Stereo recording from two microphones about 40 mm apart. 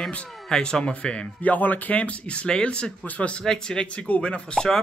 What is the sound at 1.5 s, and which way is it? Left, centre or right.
Speech, left.